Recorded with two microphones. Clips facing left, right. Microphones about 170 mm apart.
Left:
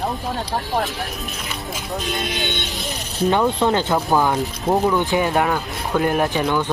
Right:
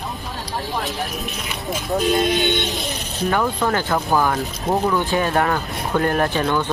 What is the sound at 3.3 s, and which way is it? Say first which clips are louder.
Speech: left 2 dB; 20° left (ahead or behind).